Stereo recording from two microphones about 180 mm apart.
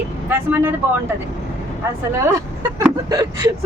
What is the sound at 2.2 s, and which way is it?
A woman's voice, 15° right (ahead or behind).